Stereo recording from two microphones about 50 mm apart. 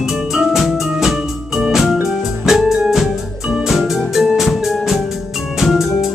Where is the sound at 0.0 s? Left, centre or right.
Centre.